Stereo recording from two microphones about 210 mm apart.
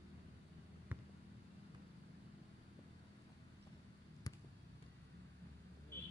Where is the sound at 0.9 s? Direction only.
10° right (ahead or behind).